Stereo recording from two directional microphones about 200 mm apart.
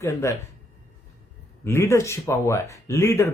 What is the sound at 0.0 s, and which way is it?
Speech, 15° left (ahead or behind).